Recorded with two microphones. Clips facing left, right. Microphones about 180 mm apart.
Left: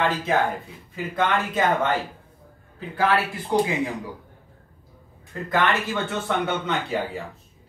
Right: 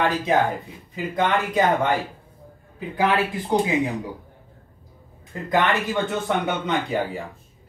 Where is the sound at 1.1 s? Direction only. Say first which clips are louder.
Right 2 dB; 15° right (ahead or behind).